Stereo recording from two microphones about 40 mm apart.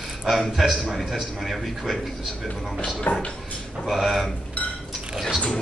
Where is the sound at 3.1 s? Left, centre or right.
Left.